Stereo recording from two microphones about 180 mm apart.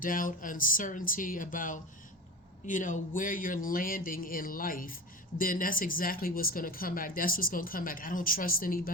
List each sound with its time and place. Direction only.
0.0 s speech: 50° left (ahead or behind)